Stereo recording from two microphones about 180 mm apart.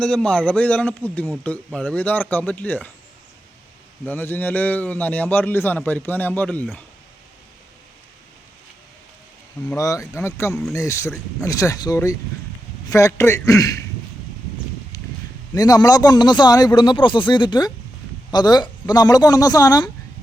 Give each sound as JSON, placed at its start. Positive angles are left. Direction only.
{"t": 0.0, "sound": "a man's voice", "side_deg": 5}
{"t": 4.0, "sound": "a man's voice", "side_deg": 10}
{"t": 9.7, "sound": "a man's voice", "side_deg": 20}
{"t": 14.9, "sound": "a sound", "side_deg": 20}
{"t": 15.5, "sound": "a man's voice", "side_deg": 20}